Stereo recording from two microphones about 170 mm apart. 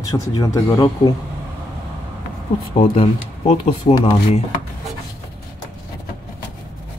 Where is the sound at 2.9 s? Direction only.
35° left (ahead or behind).